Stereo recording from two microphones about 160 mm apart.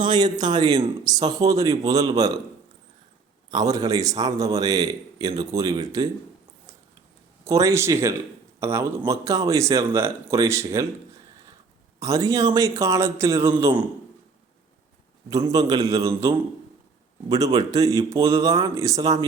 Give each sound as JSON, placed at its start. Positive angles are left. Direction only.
{"t": 0.0, "sound": "speech", "side_deg": -25}
{"t": 3.5, "sound": "speech", "side_deg": -25}
{"t": 7.4, "sound": "speech", "side_deg": -20}
{"t": 11.9, "sound": "speech", "side_deg": -20}
{"t": 15.3, "sound": "speech", "side_deg": -20}